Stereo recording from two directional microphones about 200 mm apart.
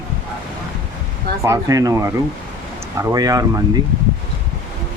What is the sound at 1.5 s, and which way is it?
Speech, 15° right (ahead or behind).